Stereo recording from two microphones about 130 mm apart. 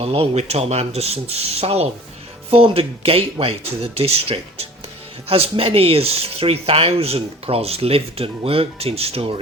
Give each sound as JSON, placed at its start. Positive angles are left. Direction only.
{"t": 0.0, "sound": "speech", "side_deg": -50}